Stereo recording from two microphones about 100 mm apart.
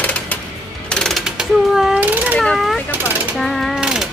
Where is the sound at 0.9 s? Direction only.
5° left (ahead or behind).